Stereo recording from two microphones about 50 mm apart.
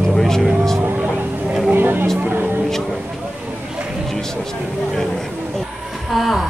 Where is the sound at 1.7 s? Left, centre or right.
Right.